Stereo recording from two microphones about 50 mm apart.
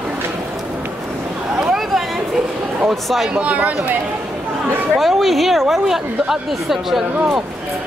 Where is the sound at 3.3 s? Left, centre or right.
Right.